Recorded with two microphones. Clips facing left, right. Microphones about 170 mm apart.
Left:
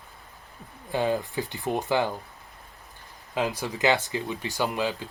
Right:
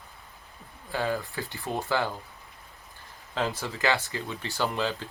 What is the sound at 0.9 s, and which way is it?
Speech, 20° left (ahead or behind).